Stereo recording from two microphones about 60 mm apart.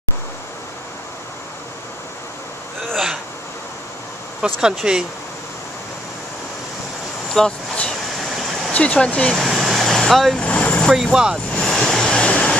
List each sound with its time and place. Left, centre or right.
4.6 s speech: centre
7.3 s vehicle: centre
8.7 s speech: left
9.3 s vehicle: centre
10.4 s vehicle: left
10.9 s speech: centre
11.6 s vehicle: centre
12.1 s a sound: centre